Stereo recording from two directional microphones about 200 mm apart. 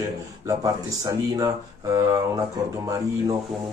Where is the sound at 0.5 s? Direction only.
15° right (ahead or behind).